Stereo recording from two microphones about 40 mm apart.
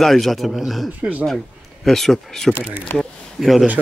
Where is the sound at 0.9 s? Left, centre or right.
Right.